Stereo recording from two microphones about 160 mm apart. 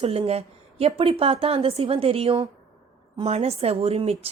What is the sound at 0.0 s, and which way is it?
A woman's voice, 40° right (ahead or behind).